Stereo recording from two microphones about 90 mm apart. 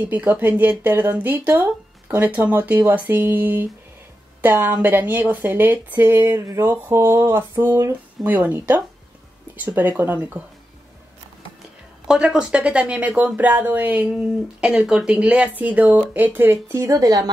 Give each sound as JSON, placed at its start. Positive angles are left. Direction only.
{"t": 0.0, "sound": "speech", "side_deg": -20}
{"t": 6.1, "sound": "speech", "side_deg": -35}
{"t": 8.2, "sound": "speech", "side_deg": 0}
{"t": 8.5, "sound": "speech", "side_deg": -20}
{"t": 12.1, "sound": "speech", "side_deg": -5}